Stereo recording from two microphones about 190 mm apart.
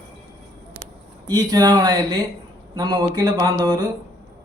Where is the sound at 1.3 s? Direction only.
20° right (ahead or behind).